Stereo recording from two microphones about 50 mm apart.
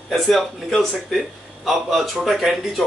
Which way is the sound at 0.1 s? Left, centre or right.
Centre.